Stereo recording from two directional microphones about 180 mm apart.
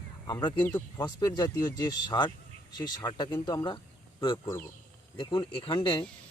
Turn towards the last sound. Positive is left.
turn(degrees=25)  # may be behind; listen again after turning